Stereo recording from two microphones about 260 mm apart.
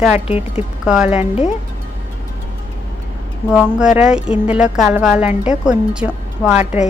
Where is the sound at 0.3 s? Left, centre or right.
Left.